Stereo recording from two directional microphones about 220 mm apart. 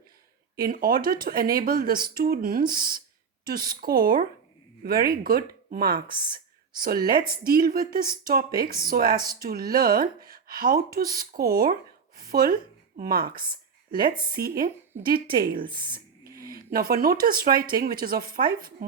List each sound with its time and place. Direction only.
0.5 s speech: 40° right (ahead or behind)
13.0 s speech: 40° right (ahead or behind)